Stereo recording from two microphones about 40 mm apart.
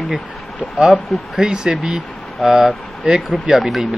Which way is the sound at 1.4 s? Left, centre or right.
Centre.